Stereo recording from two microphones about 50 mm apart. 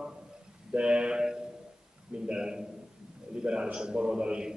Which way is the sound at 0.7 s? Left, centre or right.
Right.